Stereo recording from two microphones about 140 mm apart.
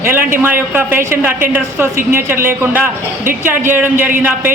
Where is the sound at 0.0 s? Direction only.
15° right (ahead or behind).